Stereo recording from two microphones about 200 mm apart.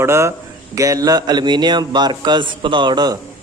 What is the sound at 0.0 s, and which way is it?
Speech, 15° right (ahead or behind).